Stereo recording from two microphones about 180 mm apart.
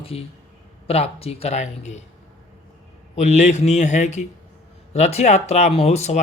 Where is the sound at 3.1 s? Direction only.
40° left (ahead or behind).